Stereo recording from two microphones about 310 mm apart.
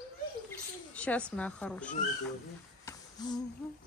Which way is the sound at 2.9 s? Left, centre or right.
Centre.